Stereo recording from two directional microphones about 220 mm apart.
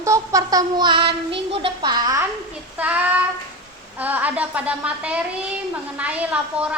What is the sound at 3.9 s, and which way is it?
A woman's voice, 5° right (ahead or behind).